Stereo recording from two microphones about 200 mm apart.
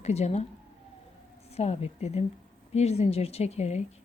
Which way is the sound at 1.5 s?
30° left (ahead or behind).